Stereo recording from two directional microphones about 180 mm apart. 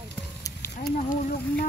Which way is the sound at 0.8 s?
50° left (ahead or behind).